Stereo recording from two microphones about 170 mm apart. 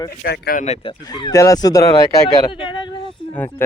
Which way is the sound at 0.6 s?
35° left (ahead or behind).